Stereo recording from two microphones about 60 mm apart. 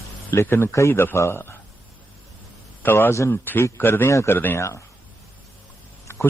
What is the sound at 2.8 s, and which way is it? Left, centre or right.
Speech, left.